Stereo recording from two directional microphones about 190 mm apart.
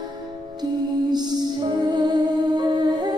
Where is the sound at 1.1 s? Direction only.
20° right (ahead or behind).